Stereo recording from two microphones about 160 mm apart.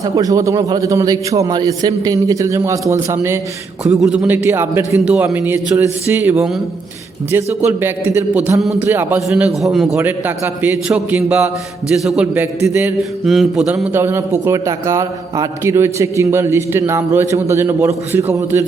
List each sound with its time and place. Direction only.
0.0 s a man's voice: 20° right (ahead or behind)
4.1 s a man's voice: 10° right (ahead or behind)
13.2 s a man's voice: centre (ahead or behind); by 18.6 s 15° right (ahead or behind)